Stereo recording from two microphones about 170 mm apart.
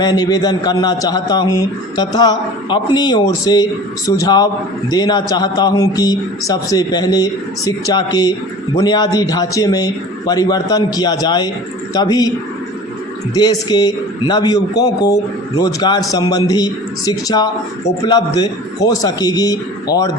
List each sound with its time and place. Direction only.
0.0 s a man's voice: 25° left (ahead or behind)
13.3 s a man's voice: 25° left (ahead or behind)